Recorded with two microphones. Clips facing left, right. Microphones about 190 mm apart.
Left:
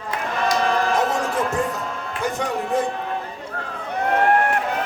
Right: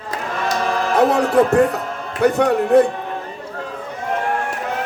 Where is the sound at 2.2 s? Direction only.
65° right (ahead or behind).